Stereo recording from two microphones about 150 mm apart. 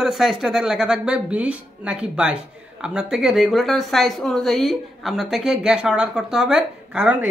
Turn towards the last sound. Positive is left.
turn(degrees=-5)  # may be behind; listen again after turning